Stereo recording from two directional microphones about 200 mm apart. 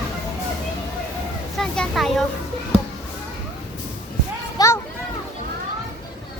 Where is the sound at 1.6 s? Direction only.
Centre (ahead or behind).